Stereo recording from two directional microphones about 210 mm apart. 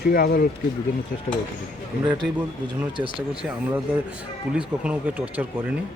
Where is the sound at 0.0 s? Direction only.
50° left (ahead or behind).